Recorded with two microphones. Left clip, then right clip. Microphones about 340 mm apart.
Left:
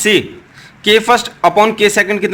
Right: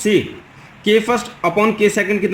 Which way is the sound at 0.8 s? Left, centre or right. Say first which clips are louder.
Left 5 dB; left.